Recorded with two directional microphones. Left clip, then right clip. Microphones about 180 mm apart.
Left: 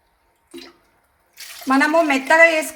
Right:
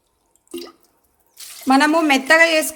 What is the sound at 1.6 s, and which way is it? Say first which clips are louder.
A woman's voice: right 1 dB; 60° right (ahead or behind).